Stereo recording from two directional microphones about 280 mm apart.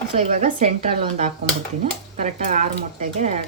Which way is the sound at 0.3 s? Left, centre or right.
Right.